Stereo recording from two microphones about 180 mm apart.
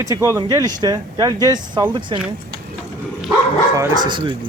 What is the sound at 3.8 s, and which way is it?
Speech, 25° right (ahead or behind).